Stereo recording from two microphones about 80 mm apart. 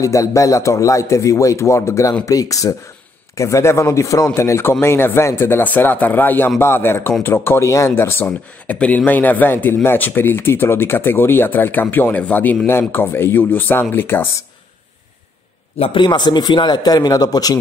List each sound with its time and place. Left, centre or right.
0.0 s a man's voice: left
15.9 s a man's voice: left